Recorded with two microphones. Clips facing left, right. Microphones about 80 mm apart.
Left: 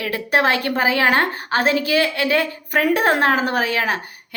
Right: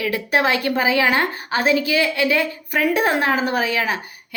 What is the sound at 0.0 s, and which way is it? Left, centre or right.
A woman's voice, left.